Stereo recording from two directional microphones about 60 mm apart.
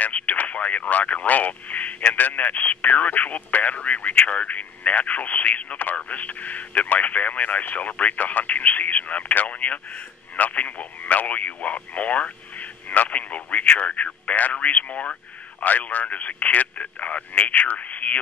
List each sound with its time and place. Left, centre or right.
0.0 s speech: left